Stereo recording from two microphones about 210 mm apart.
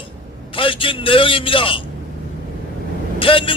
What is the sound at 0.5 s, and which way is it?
A man's voice, 25° left (ahead or behind).